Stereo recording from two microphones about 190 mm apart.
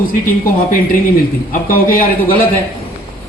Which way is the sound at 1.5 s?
45° left (ahead or behind).